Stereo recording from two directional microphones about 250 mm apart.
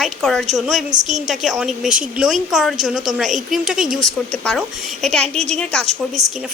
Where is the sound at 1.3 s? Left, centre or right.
Centre.